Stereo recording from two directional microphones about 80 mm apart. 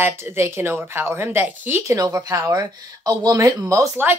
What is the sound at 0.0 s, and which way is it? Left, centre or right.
Speech, right.